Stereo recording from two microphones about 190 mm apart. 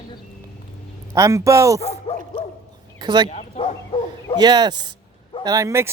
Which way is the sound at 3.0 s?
20° right (ahead or behind).